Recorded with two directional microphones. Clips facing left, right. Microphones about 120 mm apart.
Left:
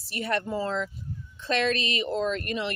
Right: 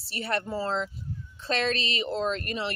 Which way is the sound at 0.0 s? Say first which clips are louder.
Left 2 dB; 30° right (ahead or behind).